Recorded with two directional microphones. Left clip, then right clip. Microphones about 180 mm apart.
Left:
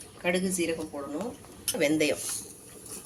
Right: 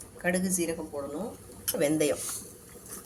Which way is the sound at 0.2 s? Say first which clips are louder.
Left 1 dB; 35° right (ahead or behind).